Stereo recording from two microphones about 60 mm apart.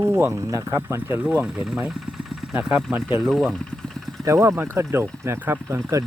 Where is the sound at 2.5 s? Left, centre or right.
Right.